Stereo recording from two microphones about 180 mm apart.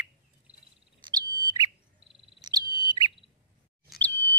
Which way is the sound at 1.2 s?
20° right (ahead or behind).